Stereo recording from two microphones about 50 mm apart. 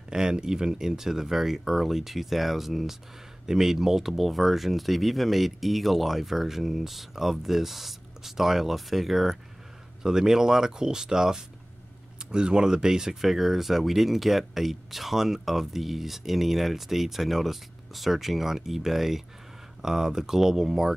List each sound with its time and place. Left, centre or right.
0.1 s speech: centre